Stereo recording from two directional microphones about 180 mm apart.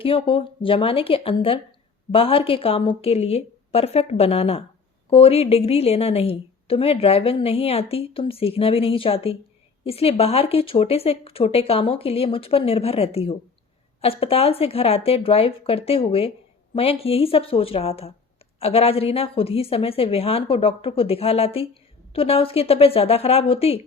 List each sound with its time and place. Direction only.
0.0 s a woman's voice: 30° left (ahead or behind)